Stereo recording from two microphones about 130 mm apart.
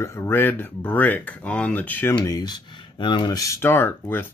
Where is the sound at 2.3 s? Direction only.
30° left (ahead or behind).